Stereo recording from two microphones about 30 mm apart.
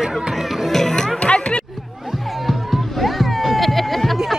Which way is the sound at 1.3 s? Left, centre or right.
Left.